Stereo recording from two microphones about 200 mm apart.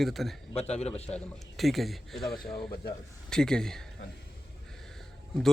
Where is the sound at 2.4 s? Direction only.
25° left (ahead or behind).